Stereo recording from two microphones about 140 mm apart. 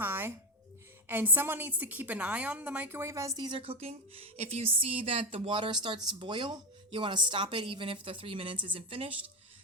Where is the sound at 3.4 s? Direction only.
35° right (ahead or behind).